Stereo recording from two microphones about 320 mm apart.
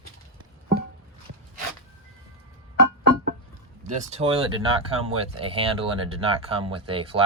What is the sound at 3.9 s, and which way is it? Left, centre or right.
Speech, right.